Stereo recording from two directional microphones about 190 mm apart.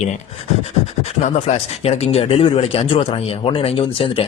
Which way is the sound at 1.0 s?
35° left (ahead or behind).